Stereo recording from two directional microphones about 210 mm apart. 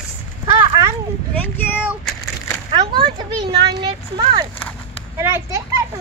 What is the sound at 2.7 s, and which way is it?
Speech, 20° right (ahead or behind).